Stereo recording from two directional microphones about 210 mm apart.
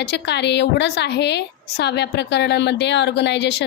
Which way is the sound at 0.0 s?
55° left (ahead or behind).